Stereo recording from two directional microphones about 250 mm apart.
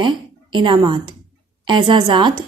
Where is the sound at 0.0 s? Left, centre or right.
Centre.